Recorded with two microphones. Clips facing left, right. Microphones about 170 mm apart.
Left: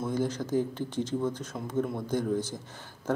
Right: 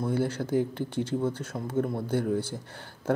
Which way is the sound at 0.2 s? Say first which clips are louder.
Right 2 dB; 10° right (ahead or behind).